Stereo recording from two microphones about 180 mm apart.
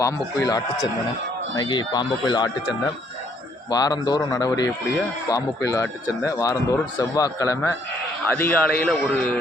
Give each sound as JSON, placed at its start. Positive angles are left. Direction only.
{"t": 0.0, "sound": "a man's voice", "side_deg": 20}